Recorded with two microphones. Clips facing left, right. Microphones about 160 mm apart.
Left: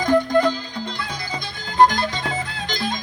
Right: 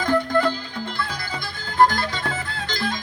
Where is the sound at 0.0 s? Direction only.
15° left (ahead or behind).